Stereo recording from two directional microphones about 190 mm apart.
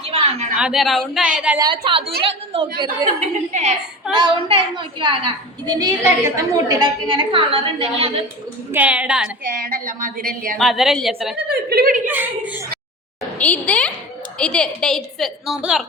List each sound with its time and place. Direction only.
0.1 s a sound: 30° right (ahead or behind)
0.5 s a woman's voice: 5° right (ahead or behind)
1.5 s a woman's voice: 25° right (ahead or behind)
3.2 s a woman's voice: 35° right (ahead or behind)
8.7 s a woman's voice: 5° right (ahead or behind)
9.5 s a woman's voice: 50° right (ahead or behind)
10.6 s a woman's voice: centre (ahead or behind)
11.4 s a woman's voice: 50° right (ahead or behind)
12.0 s a woman's voice: 10° right (ahead or behind)
13.4 s a woman's voice: 10° left (ahead or behind)